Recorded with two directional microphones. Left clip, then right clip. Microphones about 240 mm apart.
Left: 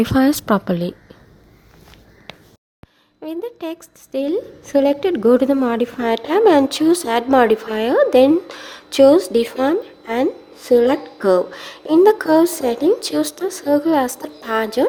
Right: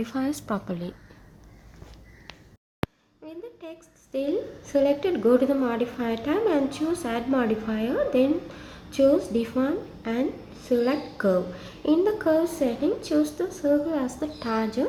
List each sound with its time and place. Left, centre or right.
0.0 s a woman's voice: left
2.3 s a sound: left
3.2 s a woman's voice: left